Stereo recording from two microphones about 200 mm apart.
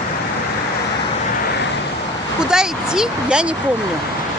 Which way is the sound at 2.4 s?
5° right (ahead or behind).